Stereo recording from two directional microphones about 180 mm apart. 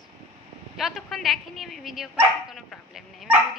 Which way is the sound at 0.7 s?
Centre (ahead or behind).